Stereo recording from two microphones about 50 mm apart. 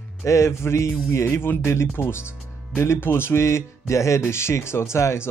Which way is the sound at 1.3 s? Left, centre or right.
Left.